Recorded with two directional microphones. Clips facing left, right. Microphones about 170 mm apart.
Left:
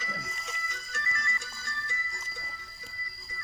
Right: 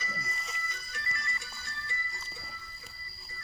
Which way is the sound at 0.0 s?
90° left.